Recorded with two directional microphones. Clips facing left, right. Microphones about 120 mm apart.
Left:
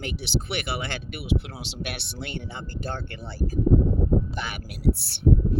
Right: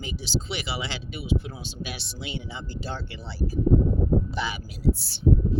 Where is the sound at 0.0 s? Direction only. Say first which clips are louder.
Left 1 dB; 60° left (ahead or behind).